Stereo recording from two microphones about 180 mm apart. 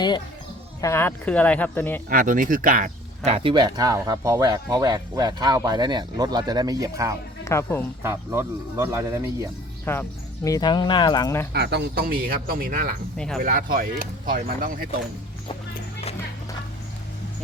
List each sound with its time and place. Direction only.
0.8 s speech: 15° left (ahead or behind)
2.0 s speech: 50° right (ahead or behind)
3.3 s speech: 25° right (ahead or behind)
7.4 s speech: 15° left (ahead or behind)
8.0 s speech: 15° right (ahead or behind)
9.8 s speech: 10° left (ahead or behind)
11.5 s speech: 65° right (ahead or behind)
13.1 s speech: 5° left (ahead or behind)
13.4 s speech: 50° right (ahead or behind)